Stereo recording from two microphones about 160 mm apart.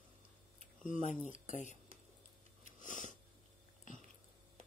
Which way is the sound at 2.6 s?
50° left (ahead or behind).